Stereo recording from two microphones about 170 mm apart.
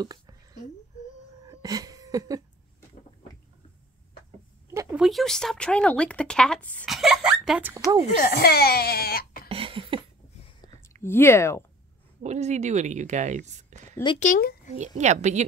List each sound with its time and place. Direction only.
0.0 s a sound: 25° right (ahead or behind)
4.9 s speech: centre (ahead or behind)
8.2 s speech: 65° left (ahead or behind)
9.5 s a sound: 30° right (ahead or behind)
11.0 s speech: 15° left (ahead or behind)
12.2 s speech: 40° right (ahead or behind)
14.2 s speech: 60° left (ahead or behind)
15.0 s a woman's voice: 45° right (ahead or behind)